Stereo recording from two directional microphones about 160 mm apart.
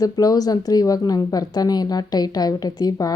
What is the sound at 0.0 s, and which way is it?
Speech, 20° left (ahead or behind).